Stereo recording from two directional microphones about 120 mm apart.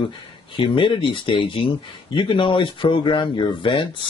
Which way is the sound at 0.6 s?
45° left (ahead or behind).